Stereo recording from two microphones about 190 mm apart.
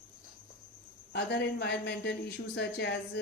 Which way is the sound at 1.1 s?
65° left (ahead or behind).